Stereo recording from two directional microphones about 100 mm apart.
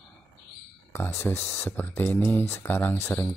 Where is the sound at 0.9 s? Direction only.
25° left (ahead or behind).